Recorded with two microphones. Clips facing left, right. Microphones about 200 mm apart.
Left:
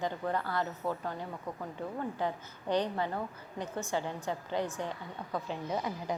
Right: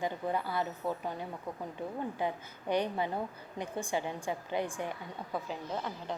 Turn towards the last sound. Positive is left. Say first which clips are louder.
# left 3 dB
turn(degrees=5)  # may be behind; listen again after turning